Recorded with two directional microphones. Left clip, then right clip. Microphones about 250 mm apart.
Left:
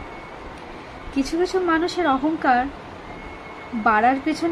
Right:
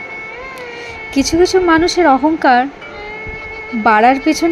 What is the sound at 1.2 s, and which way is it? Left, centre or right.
A woman's voice, right.